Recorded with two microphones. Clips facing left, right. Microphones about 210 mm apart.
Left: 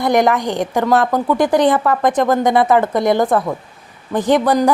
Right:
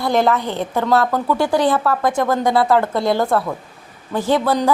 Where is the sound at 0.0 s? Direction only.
15° left (ahead or behind).